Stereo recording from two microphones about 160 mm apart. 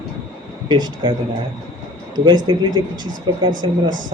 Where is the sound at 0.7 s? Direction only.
30° right (ahead or behind).